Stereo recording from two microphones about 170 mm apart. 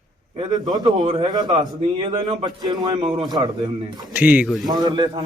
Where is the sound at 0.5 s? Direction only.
25° right (ahead or behind).